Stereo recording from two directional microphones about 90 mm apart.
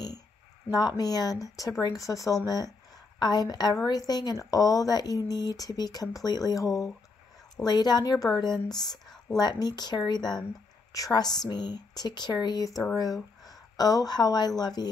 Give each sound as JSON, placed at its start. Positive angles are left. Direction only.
{"t": 0.7, "sound": "speech", "side_deg": 50}
{"t": 7.6, "sound": "speech", "side_deg": 50}
{"t": 9.0, "sound": "a sound", "side_deg": 5}
{"t": 9.4, "sound": "speech", "side_deg": 50}